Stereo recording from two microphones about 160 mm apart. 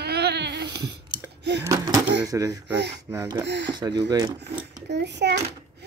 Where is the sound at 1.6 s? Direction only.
20° right (ahead or behind).